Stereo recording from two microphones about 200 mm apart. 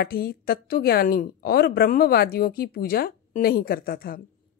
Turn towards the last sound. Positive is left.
turn(degrees=45)  # may be behind; listen again after turning